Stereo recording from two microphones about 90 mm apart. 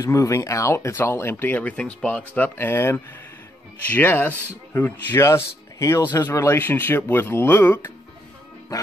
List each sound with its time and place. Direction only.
0.0 s a man's voice: 35° left (ahead or behind)